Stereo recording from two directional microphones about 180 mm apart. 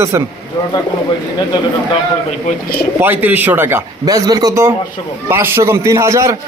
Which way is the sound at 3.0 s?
10° right (ahead or behind).